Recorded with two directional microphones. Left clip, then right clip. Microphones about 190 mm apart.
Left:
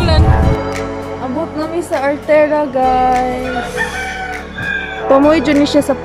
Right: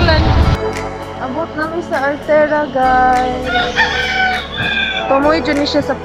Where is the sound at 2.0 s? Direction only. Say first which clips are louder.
Left 1 dB; 20° left (ahead or behind).